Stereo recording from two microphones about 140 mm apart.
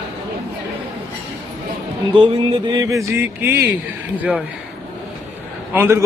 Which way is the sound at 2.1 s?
40° right (ahead or behind).